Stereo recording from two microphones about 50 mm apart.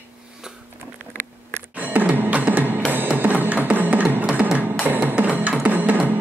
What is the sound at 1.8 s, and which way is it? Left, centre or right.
Music, right.